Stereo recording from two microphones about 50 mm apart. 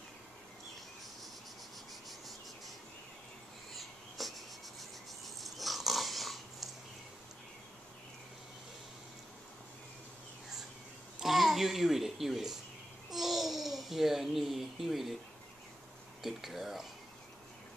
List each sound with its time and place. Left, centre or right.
2.0 s cricket: centre
4.2 s writing: centre
5.2 s dog: centre
11.1 s a sound: centre
13.1 s babbling: centre
16.2 s cutlery: centre